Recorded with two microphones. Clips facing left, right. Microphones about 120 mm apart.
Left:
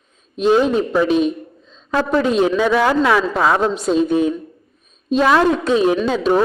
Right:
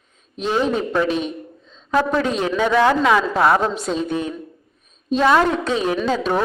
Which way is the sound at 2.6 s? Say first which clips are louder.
Left 1 dB; 5° left (ahead or behind).